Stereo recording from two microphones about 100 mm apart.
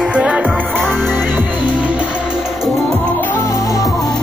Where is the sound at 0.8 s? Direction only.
5° left (ahead or behind).